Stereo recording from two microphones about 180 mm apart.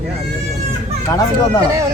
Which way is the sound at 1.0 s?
15° left (ahead or behind).